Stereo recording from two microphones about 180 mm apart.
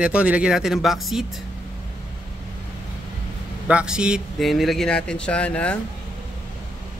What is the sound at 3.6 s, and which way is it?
Speech, 5° right (ahead or behind).